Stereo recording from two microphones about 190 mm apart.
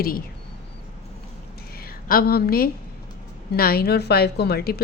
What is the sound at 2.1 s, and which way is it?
A woman's voice, 50° left (ahead or behind).